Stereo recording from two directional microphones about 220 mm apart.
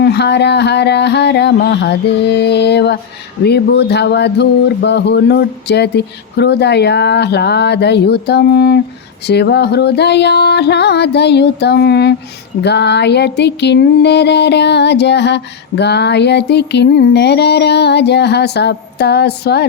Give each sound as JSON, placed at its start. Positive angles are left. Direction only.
{"t": 0.0, "sound": "music", "side_deg": 50}